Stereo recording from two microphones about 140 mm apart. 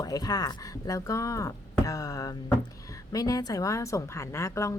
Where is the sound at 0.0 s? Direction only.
25° left (ahead or behind).